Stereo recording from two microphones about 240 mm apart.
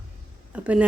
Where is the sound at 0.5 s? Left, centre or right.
Centre.